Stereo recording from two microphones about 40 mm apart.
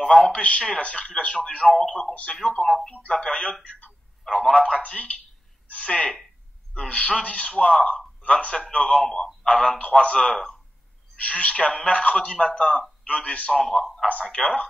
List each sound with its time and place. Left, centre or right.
0.1 s speech: left
1.8 s speech: centre
2.0 s speech: left
4.4 s speech: centre
4.8 s a man's voice: left
9.6 s a man's voice: left
10.2 s a man's voice: centre
11.1 s a man's voice: left
13.5 s a man's voice: centre
14.2 s speech: left